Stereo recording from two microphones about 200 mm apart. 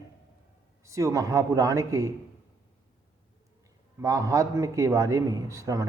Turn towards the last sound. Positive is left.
turn(degrees=-15)  # may be behind; listen again after turning